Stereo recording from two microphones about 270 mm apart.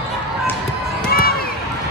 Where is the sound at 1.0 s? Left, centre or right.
Left.